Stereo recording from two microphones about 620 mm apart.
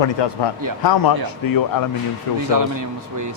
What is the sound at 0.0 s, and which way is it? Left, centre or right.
A man's voice, left.